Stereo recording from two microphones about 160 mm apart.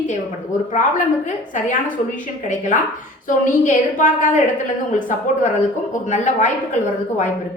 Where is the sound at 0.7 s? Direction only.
50° left (ahead or behind).